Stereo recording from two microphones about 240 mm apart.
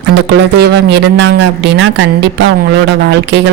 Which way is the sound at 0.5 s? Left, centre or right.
Right.